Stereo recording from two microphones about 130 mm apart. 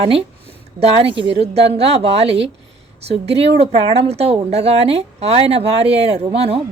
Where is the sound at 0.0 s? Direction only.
45° right (ahead or behind).